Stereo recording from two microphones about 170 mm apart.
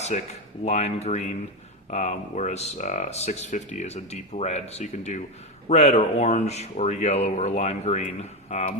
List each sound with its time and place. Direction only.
0.6 s speech: 40° left (ahead or behind)